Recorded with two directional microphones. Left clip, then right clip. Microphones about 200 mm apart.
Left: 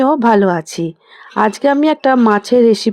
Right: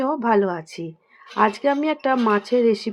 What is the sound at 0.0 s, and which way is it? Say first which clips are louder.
Speech: left 8 dB; 45° left (ahead or behind).